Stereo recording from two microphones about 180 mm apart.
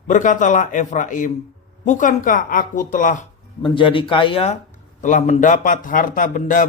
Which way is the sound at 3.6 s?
30° left (ahead or behind).